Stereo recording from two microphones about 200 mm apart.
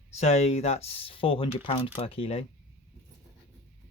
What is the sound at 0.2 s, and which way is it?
Speech, 30° left (ahead or behind).